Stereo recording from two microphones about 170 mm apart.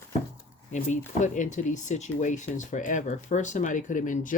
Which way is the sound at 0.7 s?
45° left (ahead or behind).